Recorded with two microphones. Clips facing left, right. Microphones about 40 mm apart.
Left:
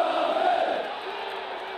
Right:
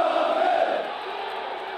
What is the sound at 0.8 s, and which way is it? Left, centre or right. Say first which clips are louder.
Crowd: right 2 dB; centre.